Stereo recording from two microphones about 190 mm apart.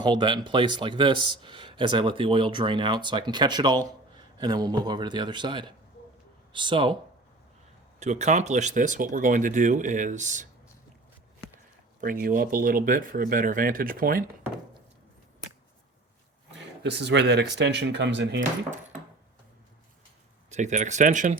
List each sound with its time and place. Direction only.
0.0 s speech: 25° right (ahead or behind)
7.9 s speech: 35° right (ahead or behind)
11.9 s speech: 45° right (ahead or behind)
16.8 s speech: 65° right (ahead or behind)
20.5 s speech: 35° right (ahead or behind)